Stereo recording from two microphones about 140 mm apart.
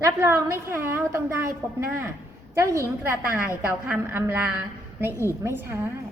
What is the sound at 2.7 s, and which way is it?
A woman's voice, 20° right (ahead or behind).